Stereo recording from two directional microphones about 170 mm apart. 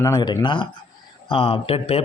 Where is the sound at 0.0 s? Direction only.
25° left (ahead or behind).